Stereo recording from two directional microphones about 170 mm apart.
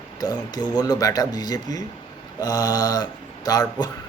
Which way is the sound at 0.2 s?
25° left (ahead or behind).